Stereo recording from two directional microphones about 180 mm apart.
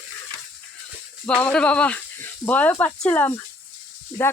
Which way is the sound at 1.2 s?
5° left (ahead or behind).